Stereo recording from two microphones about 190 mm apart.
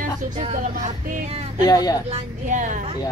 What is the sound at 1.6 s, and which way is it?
Speech, 20° left (ahead or behind).